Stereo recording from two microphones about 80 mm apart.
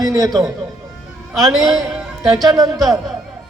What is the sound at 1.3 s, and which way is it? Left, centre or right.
A woman's voice, centre.